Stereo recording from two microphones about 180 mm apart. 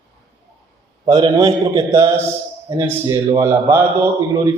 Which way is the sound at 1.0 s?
25° right (ahead or behind).